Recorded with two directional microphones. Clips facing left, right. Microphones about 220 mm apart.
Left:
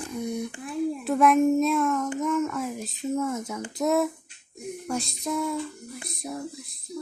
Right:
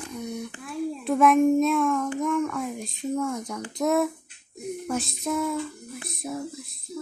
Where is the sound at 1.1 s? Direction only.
Centre (ahead or behind).